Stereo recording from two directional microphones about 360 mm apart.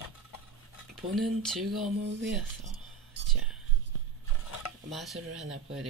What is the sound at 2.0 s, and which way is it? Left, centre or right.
Speech, right.